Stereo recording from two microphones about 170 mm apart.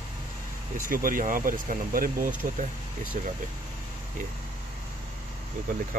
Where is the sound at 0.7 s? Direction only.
55° right (ahead or behind).